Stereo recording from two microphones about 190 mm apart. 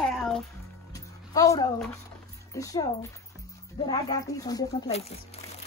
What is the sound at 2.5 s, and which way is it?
Speech, 15° left (ahead or behind).